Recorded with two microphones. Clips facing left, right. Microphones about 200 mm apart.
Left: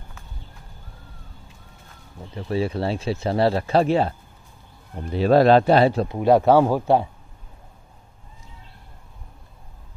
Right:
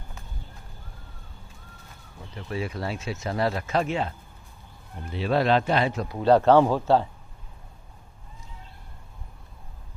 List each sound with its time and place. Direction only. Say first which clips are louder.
2.3 s speech: left 7 dB; 30° left (ahead or behind)
5.1 s speech: left 8 dB; 40° left (ahead or behind)
6.1 s speech: even; 15° left (ahead or behind)